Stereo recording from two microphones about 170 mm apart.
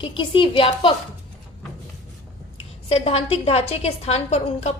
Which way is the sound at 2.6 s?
35° left (ahead or behind).